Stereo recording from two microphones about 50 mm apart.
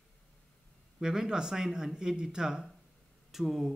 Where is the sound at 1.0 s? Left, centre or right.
Centre.